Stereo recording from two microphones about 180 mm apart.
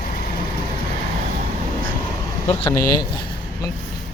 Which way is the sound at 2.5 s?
30° left (ahead or behind).